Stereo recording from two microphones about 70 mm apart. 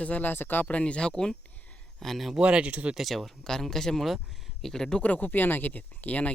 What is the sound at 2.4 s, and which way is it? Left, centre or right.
Speech, centre.